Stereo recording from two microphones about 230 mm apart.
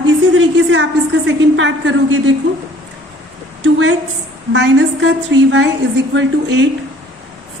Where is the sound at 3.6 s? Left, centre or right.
Right.